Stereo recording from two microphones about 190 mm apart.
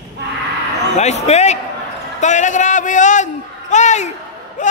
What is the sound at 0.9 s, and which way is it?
Speech, 35° left (ahead or behind).